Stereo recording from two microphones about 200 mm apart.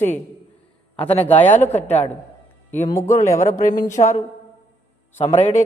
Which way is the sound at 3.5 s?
40° left (ahead or behind).